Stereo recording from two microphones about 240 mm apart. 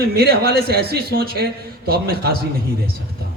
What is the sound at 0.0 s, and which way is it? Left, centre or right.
A man's voice, right.